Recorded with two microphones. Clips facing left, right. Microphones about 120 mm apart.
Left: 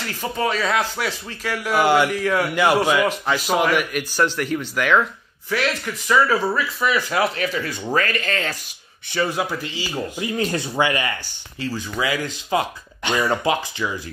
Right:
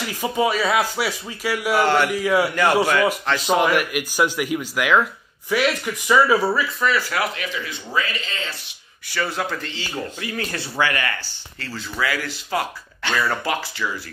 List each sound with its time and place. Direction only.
0.0 s speech: 10° right (ahead or behind)
1.8 s a man's voice: 10° left (ahead or behind)
2.0 s speech: 10° right (ahead or behind)
2.5 s a man's voice: 10° left (ahead or behind); by 6.6 s 10° right (ahead or behind)
6.8 s speech: 15° left (ahead or behind)
7.3 s speech: 40° left (ahead or behind)
9.1 s speech: 15° left (ahead or behind)